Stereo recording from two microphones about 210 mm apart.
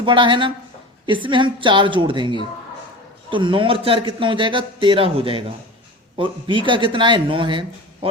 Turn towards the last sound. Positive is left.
turn(degrees=-25)  # may be behind; listen again after turning